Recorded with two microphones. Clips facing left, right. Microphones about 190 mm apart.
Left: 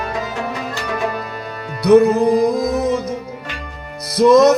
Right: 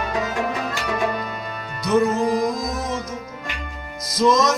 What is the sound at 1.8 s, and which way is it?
Music, 60° left (ahead or behind).